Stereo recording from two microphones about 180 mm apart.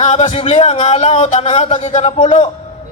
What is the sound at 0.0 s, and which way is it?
A man's voice, 40° left (ahead or behind).